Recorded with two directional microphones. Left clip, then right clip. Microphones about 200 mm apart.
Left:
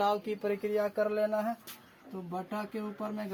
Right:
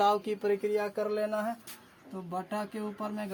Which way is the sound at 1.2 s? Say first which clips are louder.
Left 1 dB; 25° right (ahead or behind).